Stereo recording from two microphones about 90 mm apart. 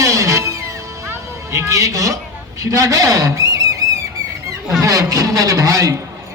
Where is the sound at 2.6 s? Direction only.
35° right (ahead or behind).